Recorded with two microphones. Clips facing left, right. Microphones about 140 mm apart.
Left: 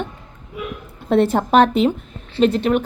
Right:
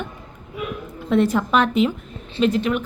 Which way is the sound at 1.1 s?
30° left (ahead or behind).